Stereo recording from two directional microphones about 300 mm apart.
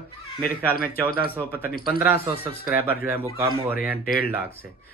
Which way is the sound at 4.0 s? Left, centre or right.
Left.